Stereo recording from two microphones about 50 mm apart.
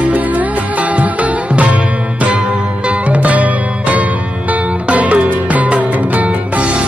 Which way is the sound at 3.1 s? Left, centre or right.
Right.